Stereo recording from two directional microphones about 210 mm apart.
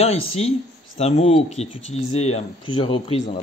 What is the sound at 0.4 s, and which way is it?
Speech, 30° left (ahead or behind).